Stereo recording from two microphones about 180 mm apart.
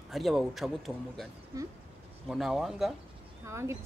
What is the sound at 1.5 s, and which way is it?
Speech, 20° right (ahead or behind).